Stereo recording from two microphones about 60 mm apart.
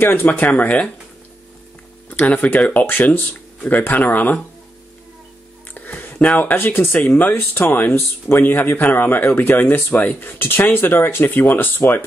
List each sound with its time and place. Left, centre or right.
0.0 s speech: left
2.0 s speech: left
5.8 s a sound: left
6.1 s speech: left